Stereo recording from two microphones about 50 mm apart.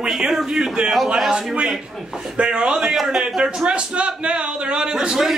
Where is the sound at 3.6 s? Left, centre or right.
Right.